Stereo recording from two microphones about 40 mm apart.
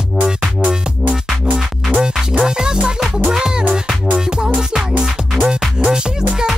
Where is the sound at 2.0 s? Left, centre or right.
Centre.